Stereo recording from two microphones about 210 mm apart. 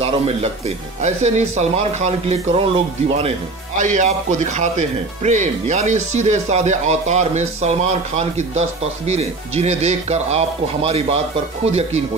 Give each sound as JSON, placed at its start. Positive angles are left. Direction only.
{"t": 0.0, "sound": "speech", "side_deg": -30}